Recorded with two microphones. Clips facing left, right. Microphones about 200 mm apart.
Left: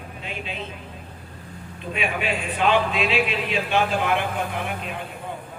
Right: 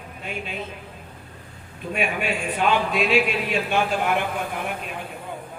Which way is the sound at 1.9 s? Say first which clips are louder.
Right 1 dB; 50° right (ahead or behind).